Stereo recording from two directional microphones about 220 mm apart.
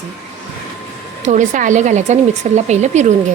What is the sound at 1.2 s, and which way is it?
Speech, 35° right (ahead or behind).